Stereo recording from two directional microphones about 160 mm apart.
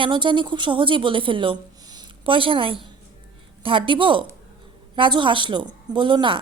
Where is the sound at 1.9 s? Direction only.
35° right (ahead or behind).